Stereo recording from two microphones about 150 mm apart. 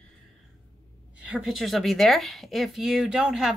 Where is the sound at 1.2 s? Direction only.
5° right (ahead or behind).